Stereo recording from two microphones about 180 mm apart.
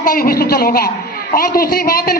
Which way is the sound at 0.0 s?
50° left (ahead or behind).